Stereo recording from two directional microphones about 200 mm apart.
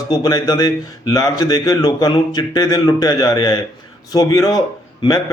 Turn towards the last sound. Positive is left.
turn(degrees=20)  # may be behind; listen again after turning